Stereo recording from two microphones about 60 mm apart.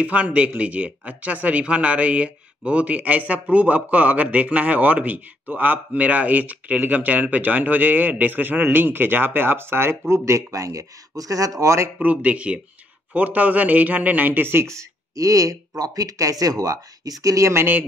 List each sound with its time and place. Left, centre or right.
0.0 s speech: right
12.0 s speech: right
15.1 s speech: right
15.8 s speech: right
17.2 s speech: right